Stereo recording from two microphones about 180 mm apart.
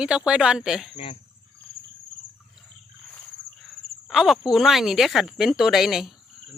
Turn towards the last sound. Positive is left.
turn(degrees=0)  # may be behind; listen again after turning